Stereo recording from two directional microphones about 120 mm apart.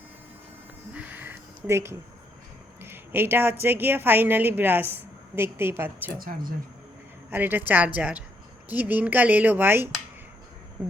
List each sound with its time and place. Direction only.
0.9 s a sound: 15° right (ahead or behind)
2.8 s a woman's voice: 20° right (ahead or behind)
7.3 s a woman's voice: 15° right (ahead or behind)